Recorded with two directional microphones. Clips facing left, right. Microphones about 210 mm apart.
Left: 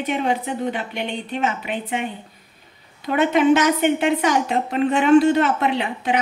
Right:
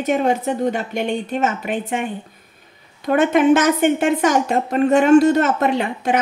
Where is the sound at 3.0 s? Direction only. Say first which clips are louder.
Right 2 dB; 50° right (ahead or behind).